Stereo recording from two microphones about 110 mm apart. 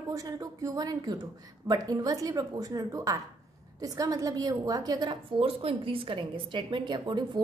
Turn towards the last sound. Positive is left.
turn(degrees=-45)  # may be behind; listen again after turning